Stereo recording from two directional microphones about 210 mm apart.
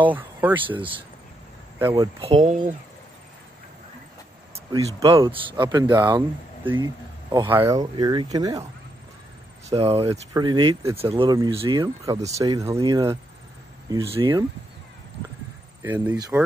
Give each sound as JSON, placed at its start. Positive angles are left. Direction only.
{"t": 0.1, "sound": "speech", "side_deg": -10}
{"t": 0.7, "sound": "speech", "side_deg": -25}
{"t": 1.8, "sound": "speech", "side_deg": -10}
{"t": 2.2, "sound": "speech", "side_deg": -30}
{"t": 4.7, "sound": "speech", "side_deg": -20}
{"t": 7.9, "sound": "speech", "side_deg": -20}
{"t": 9.7, "sound": "speech", "side_deg": -25}
{"t": 15.8, "sound": "speech", "side_deg": -10}